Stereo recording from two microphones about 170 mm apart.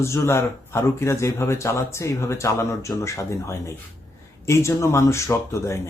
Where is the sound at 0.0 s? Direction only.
15° left (ahead or behind).